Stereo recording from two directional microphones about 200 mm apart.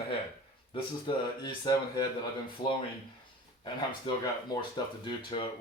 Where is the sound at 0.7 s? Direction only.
25° left (ahead or behind).